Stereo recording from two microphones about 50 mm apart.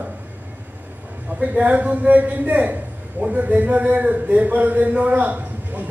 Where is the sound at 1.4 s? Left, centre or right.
Right.